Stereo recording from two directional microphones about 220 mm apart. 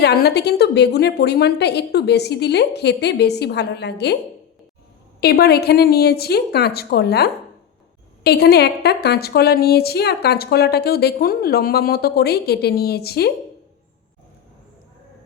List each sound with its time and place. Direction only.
0.0 s a woman's voice: 45° left (ahead or behind)
5.2 s a woman's voice: 45° left (ahead or behind)